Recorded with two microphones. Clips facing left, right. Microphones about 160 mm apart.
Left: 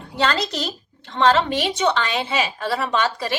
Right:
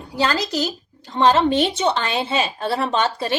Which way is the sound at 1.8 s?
30° right (ahead or behind).